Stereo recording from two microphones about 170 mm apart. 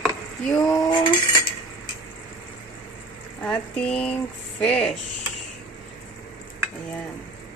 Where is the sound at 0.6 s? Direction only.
20° left (ahead or behind).